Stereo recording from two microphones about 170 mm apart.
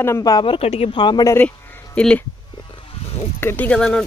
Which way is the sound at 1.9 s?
10° left (ahead or behind).